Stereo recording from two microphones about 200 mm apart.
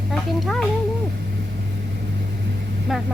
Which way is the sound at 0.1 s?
Centre (ahead or behind).